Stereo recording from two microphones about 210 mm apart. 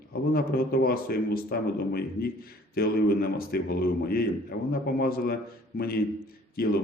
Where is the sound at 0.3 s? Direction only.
45° left (ahead or behind).